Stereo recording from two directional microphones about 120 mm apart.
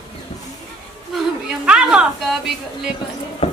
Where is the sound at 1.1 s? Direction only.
10° right (ahead or behind).